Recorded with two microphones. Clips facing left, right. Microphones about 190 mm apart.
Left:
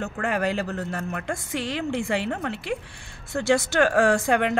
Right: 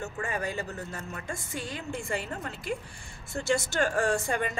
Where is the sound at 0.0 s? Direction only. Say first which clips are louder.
Left 7 dB; 75° left (ahead or behind).